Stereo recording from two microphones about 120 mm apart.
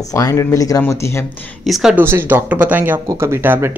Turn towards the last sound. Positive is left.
turn(degrees=-20)  # may be behind; listen again after turning